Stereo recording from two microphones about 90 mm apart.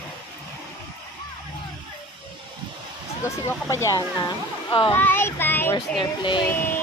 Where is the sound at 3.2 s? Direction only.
30° left (ahead or behind); by 4.7 s 50° left (ahead or behind).